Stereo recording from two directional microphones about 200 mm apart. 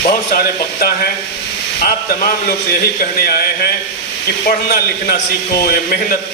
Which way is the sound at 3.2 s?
50° left (ahead or behind).